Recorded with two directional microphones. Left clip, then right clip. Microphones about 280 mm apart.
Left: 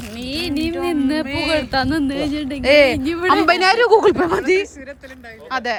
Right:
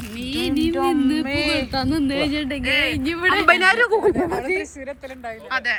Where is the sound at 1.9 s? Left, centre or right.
Centre.